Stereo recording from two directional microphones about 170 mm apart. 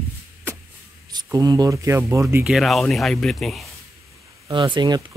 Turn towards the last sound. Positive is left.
turn(degrees=-25)  # may be behind; listen again after turning